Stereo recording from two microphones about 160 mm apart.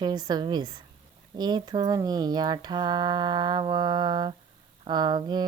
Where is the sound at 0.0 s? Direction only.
25° right (ahead or behind).